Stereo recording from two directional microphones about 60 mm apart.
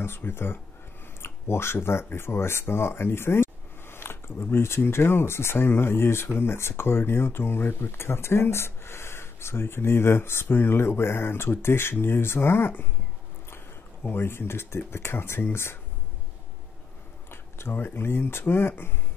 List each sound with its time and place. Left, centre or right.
0.0 s speech: left
14.0 s speech: left
17.3 s speech: left